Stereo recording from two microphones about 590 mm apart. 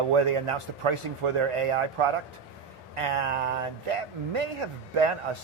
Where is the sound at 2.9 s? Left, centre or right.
Right.